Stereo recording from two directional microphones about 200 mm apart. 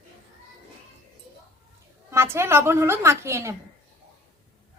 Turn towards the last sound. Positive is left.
turn(degrees=-15)  # may be behind; listen again after turning